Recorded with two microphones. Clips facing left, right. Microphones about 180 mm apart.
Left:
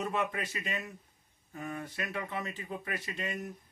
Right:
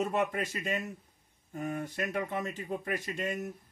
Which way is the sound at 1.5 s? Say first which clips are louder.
Right 4 dB; 45° right (ahead or behind).